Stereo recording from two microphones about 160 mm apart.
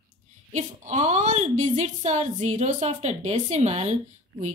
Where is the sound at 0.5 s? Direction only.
50° right (ahead or behind).